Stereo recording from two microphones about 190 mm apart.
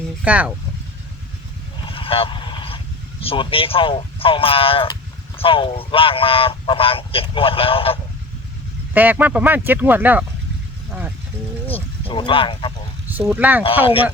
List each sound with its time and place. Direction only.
0.3 s speech: 5° right (ahead or behind)
1.8 s a sound: 30° left (ahead or behind)
5.4 s speech: 30° left (ahead or behind)
8.9 s speech: 10° right (ahead or behind)
11.7 s speech: 30° left (ahead or behind)
13.1 s speech: 10° right (ahead or behind)
13.7 s speech: 30° left (ahead or behind)